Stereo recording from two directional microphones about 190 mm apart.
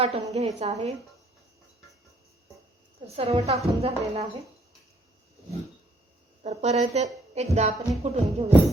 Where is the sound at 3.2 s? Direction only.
30° right (ahead or behind).